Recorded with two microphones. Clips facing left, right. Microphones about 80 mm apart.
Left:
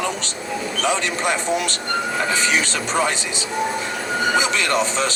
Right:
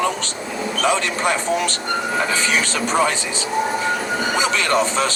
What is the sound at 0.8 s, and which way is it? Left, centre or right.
Speech, right.